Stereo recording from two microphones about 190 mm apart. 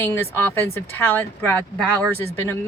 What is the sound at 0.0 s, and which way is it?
Speech, 10° left (ahead or behind).